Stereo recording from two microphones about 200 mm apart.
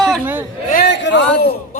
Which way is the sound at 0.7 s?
60° left (ahead or behind).